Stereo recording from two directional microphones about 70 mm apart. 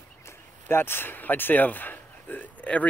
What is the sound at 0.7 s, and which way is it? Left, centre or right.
Speech, left.